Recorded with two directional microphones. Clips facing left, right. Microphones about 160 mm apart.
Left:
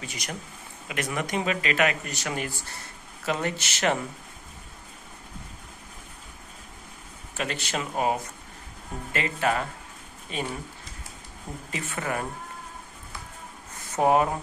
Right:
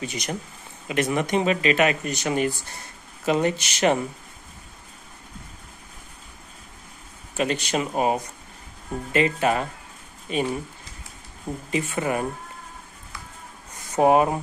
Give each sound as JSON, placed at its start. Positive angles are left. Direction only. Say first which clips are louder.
{"t": 0.0, "sound": "speech", "louder": "right 6 dB", "side_deg": -20}
{"t": 7.3, "sound": "speech", "louder": "right 6 dB", "side_deg": -20}
{"t": 11.7, "sound": "speech", "louder": "right 6 dB", "side_deg": -20}
{"t": 13.9, "sound": "speech", "louder": "right 4 dB", "side_deg": -20}